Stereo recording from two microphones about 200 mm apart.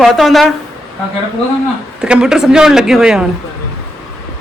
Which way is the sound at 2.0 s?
5° right (ahead or behind).